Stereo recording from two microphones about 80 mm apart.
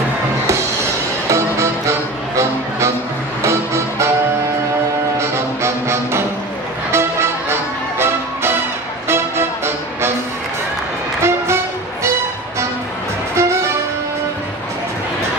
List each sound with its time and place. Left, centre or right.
1.3 s music: right
5.1 s music: right
11.2 s music: right
13.3 s music: right